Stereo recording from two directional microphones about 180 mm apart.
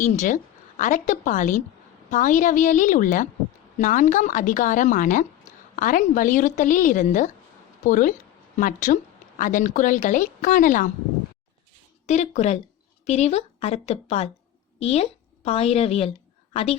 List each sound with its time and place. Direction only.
0.0 s a woman's voice: 45° left (ahead or behind)
12.0 s a woman's voice: 40° left (ahead or behind)